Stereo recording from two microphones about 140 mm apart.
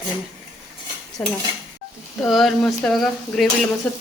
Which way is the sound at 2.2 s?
Centre (ahead or behind).